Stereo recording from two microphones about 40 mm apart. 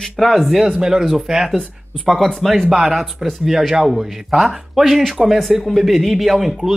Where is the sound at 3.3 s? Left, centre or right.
Centre.